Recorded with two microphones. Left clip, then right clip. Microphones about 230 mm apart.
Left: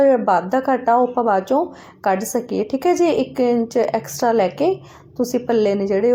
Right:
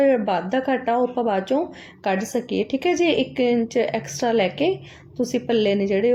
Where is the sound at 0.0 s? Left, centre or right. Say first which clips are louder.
Left 4 dB; centre.